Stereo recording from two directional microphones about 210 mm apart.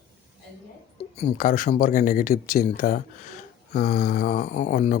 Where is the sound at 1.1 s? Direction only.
35° left (ahead or behind).